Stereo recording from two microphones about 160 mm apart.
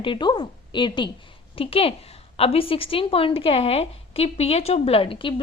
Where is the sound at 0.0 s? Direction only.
30° left (ahead or behind).